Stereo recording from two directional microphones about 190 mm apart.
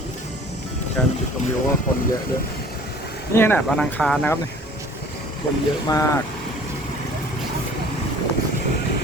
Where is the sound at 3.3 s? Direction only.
10° left (ahead or behind).